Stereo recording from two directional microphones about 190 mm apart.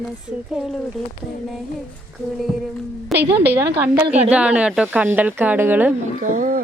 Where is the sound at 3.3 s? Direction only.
10° right (ahead or behind).